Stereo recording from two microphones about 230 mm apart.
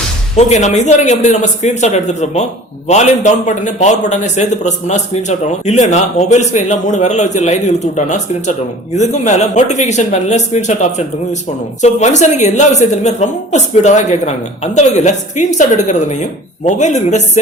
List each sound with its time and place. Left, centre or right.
0.3 s a man's voice: left